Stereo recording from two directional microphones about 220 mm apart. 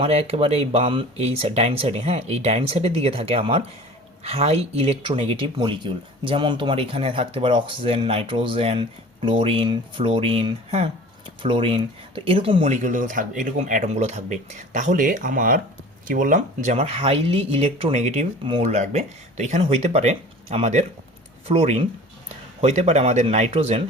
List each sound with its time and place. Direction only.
0.0 s speech: 25° right (ahead or behind)